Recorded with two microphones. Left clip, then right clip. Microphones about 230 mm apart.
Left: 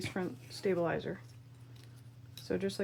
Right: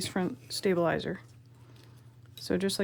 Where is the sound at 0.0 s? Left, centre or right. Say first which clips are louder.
Right 5 dB; right.